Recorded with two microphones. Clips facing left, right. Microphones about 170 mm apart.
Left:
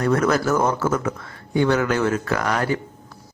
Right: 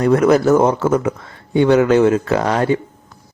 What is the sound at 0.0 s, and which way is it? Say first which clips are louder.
Speech: right 7 dB; 20° right (ahead or behind).